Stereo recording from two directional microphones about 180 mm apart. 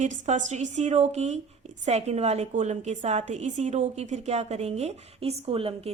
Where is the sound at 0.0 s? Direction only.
40° right (ahead or behind).